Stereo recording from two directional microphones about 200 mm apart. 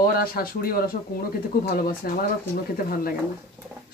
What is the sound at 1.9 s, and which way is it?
Speech, 45° left (ahead or behind).